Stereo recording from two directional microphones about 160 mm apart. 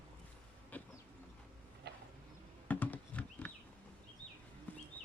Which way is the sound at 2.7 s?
10° left (ahead or behind).